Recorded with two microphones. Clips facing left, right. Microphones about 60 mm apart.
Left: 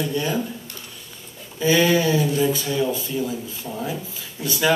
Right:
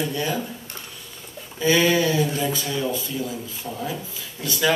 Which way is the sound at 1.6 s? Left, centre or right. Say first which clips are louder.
Left 1 dB; right.